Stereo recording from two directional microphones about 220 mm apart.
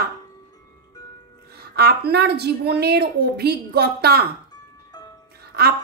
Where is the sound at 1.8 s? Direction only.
45° right (ahead or behind).